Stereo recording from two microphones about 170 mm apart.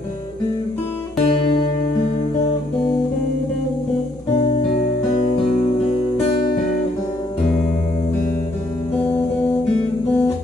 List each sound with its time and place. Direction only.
1.1 s music: 35° left (ahead or behind)